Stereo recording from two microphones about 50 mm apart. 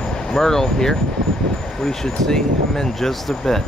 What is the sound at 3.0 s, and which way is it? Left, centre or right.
Speech, centre.